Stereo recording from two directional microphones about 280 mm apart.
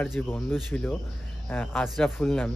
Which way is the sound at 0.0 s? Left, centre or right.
Centre.